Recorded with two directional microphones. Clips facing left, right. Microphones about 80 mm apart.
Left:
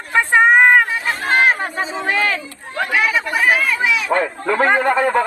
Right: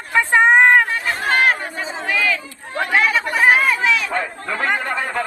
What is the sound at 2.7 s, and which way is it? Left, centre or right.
Speech, right.